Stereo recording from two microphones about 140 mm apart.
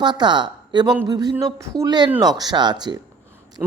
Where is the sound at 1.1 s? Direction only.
30° right (ahead or behind).